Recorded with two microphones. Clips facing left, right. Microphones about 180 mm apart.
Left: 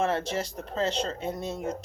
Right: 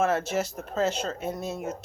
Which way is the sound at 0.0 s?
5° right (ahead or behind).